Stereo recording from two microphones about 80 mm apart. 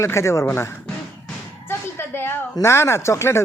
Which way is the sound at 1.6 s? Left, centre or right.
Left.